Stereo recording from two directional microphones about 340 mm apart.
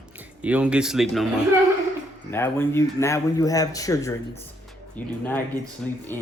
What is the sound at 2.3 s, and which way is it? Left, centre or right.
Speech, centre.